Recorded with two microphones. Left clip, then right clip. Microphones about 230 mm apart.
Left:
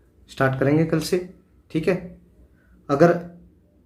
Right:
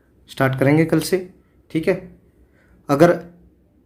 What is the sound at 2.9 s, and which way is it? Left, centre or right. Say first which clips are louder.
Speech: right 3 dB; right.